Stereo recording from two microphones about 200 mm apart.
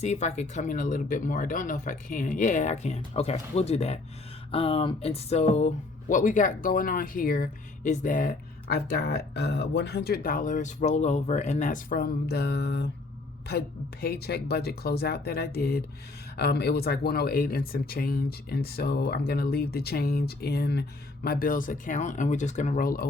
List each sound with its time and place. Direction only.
0.0 s speech: 35° left (ahead or behind)